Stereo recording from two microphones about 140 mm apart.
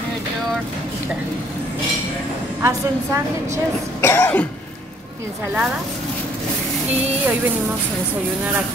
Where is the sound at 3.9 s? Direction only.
20° left (ahead or behind).